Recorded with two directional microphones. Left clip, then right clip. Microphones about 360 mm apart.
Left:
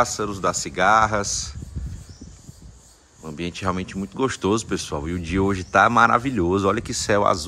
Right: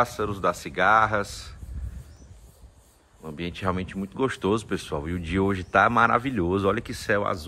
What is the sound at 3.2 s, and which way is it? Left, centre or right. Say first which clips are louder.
Speech: left 3 dB; centre.